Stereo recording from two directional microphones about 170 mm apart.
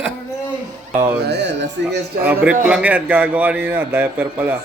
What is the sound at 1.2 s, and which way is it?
Speech, 85° right.